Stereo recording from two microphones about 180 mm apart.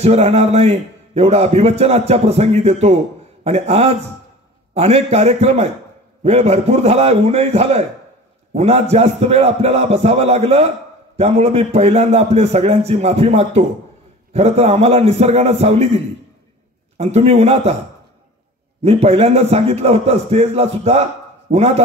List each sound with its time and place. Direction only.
0.0 s a man's voice: 35° right (ahead or behind)
18.8 s a man's voice: 35° right (ahead or behind)